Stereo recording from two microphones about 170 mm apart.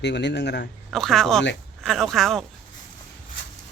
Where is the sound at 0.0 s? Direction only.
90° left.